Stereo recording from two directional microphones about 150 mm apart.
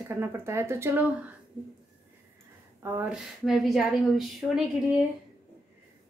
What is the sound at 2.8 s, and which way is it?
Speech, 15° right (ahead or behind).